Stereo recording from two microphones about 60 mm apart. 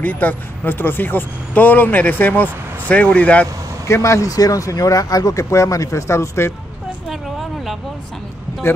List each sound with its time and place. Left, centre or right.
0.0 s speech: left
3.8 s speech: left
7.1 s a sound: centre